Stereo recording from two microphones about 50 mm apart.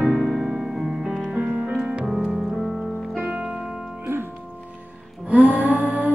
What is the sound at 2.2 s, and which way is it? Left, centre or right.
Music, centre.